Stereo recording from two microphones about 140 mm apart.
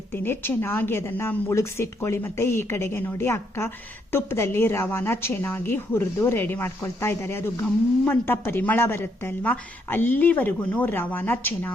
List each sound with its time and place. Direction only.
0.1 s a woman's voice: 15° left (ahead or behind)